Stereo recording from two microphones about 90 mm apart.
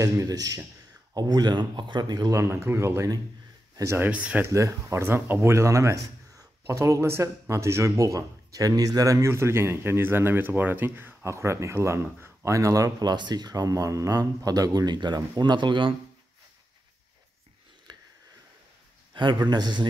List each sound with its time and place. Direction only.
0.0 s speech: 40° right (ahead or behind)
2.3 s a man's voice: 30° right (ahead or behind)
4.0 s speech: 15° right (ahead or behind)
4.5 s speech: 35° right (ahead or behind); by 15.9 s 60° right (ahead or behind)
17.9 s a sound: 55° right (ahead or behind)
19.1 s a man's voice: 55° right (ahead or behind)